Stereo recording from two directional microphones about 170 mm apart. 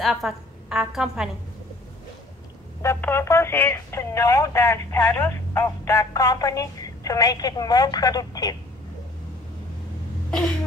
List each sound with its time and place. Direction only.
0.0 s a woman's voice: centre (ahead or behind)
2.8 s speech: 15° left (ahead or behind)